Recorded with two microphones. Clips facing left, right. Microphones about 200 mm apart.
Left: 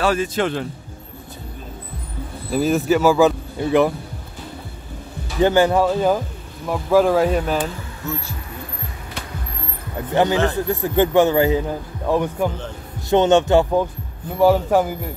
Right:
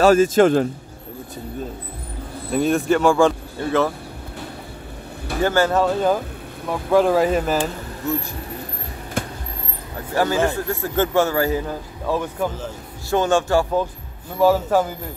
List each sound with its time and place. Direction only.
0.0 s speech: 45° right (ahead or behind)
2.5 s speech: centre (ahead or behind)
3.5 s a man's voice: 15° left (ahead or behind)
5.4 s a man's voice: 15° left (ahead or behind)
6.7 s speech: centre (ahead or behind)
9.2 s vehicle: 50° right (ahead or behind)
10.1 s a man's voice: 20° left (ahead or behind)